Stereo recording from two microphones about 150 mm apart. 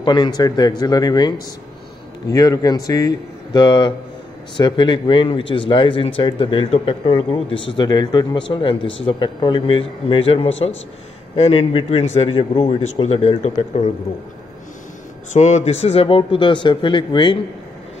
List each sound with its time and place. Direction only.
0.0 s speech: 30° left (ahead or behind)
15.3 s speech: 50° left (ahead or behind); by 17.4 s 30° left (ahead or behind)